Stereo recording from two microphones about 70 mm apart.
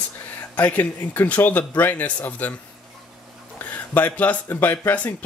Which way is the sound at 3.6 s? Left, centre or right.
Left.